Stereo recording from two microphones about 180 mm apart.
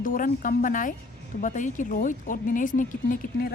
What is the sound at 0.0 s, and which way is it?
Speech, 50° left (ahead or behind).